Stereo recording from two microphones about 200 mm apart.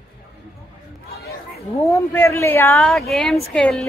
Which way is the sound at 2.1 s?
15° left (ahead or behind).